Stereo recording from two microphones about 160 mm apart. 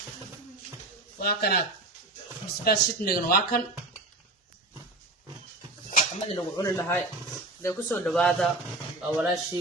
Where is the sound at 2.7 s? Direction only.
70° left (ahead or behind).